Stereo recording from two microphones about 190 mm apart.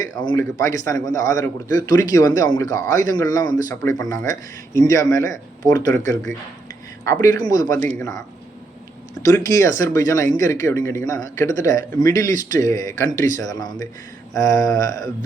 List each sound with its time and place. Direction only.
0.0 s a man's voice: 20° left (ahead or behind)
7.0 s a man's voice: 15° left (ahead or behind)
9.2 s a man's voice: 20° left (ahead or behind)